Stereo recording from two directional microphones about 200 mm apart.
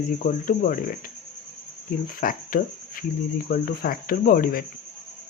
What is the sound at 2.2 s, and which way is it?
Speech, 45° left (ahead or behind).